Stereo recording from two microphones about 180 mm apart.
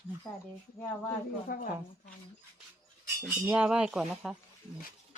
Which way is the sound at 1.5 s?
50° left (ahead or behind).